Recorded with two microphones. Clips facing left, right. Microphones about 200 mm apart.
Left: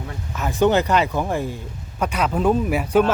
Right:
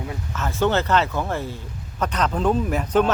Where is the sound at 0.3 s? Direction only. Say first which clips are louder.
Left 4 dB; 15° left (ahead or behind).